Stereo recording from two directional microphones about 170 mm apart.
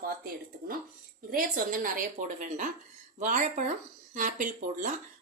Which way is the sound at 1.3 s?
55° right (ahead or behind).